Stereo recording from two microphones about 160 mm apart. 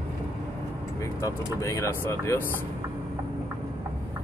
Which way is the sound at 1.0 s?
20° left (ahead or behind).